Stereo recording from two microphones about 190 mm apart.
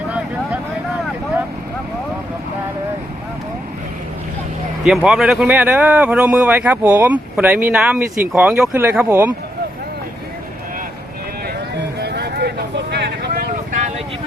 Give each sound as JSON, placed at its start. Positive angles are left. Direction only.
{"t": 5.0, "sound": "speech", "side_deg": -5}
{"t": 11.4, "sound": "vehicle", "side_deg": -60}